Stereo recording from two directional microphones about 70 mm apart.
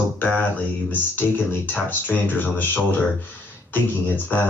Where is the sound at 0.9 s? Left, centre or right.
Left.